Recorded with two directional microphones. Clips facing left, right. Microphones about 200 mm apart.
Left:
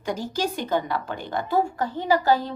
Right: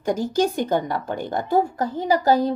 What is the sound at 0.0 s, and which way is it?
A woman's voice, 50° right (ahead or behind).